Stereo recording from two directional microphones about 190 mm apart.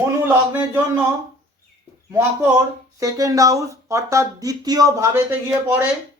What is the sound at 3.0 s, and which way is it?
Speech, 15° right (ahead or behind).